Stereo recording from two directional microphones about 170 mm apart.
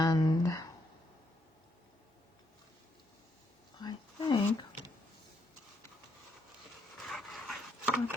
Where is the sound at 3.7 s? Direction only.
25° left (ahead or behind).